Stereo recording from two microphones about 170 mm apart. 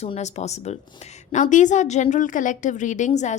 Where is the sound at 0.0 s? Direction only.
40° left (ahead or behind).